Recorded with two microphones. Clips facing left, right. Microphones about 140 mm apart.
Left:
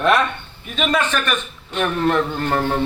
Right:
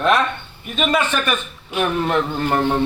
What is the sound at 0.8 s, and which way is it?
A man's voice, 5° right (ahead or behind).